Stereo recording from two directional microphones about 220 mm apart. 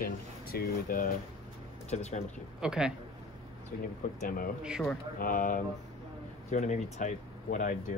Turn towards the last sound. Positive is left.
turn(degrees=35)  # may be behind; listen again after turning